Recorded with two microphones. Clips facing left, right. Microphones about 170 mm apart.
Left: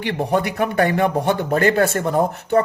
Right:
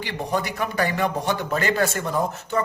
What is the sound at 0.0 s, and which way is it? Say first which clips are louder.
Speech: left 6 dB; 60° left (ahead or behind).